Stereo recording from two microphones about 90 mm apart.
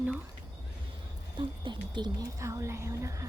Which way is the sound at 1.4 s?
60° right (ahead or behind).